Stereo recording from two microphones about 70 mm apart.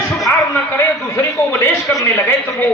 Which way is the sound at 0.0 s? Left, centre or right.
Left.